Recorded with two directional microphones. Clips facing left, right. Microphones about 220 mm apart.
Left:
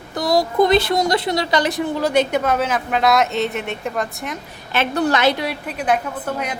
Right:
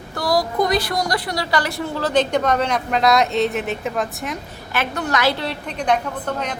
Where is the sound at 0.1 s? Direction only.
20° left (ahead or behind); by 4.4 s centre (ahead or behind).